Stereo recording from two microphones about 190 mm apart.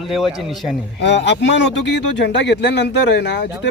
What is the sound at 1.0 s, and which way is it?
Speech, 70° left (ahead or behind).